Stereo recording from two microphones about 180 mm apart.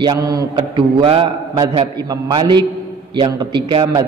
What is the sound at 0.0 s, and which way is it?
A man's voice, 20° right (ahead or behind).